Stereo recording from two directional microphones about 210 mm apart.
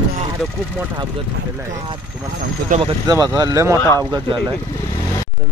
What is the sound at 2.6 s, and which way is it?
Speech, 30° right (ahead or behind).